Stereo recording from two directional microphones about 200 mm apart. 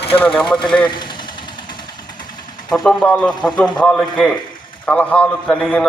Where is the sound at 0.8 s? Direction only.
25° left (ahead or behind).